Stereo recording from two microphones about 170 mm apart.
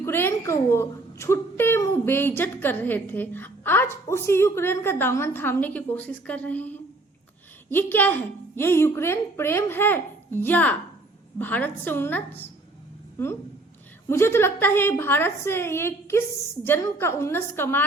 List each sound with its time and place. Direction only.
0.0 s a woman's voice: 15° left (ahead or behind)
14.1 s a woman's voice: 15° left (ahead or behind)